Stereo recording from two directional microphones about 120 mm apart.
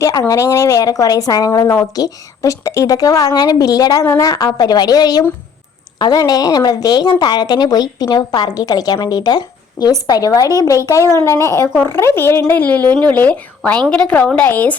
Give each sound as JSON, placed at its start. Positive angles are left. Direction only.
{"t": 0.0, "sound": "speech", "side_deg": 30}
{"t": 4.0, "sound": "speech", "side_deg": 20}
{"t": 4.3, "sound": "speech", "side_deg": 30}